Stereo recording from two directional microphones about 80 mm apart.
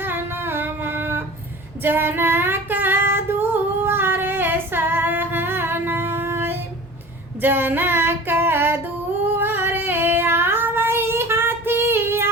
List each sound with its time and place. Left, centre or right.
0.0 s humming: right
1.8 s female singing: right
9.4 s child singing: right